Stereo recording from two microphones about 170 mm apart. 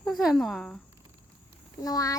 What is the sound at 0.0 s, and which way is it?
Speech, centre (ahead or behind).